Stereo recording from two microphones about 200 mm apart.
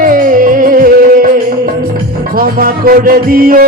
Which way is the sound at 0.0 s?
45° right (ahead or behind).